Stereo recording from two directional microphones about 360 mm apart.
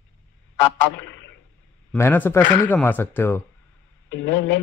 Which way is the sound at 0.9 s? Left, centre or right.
Left.